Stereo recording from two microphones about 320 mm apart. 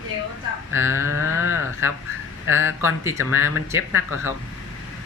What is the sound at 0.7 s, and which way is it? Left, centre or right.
Speech, centre.